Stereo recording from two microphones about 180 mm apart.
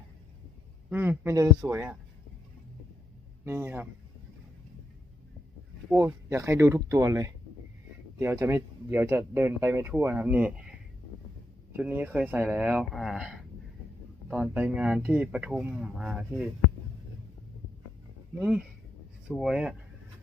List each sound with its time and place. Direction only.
0.9 s speech: 10° right (ahead or behind)
3.4 s speech: 15° right (ahead or behind)
6.0 s speech: 15° right (ahead or behind)
11.8 s speech: 10° right (ahead or behind)
18.3 s speech: 5° right (ahead or behind)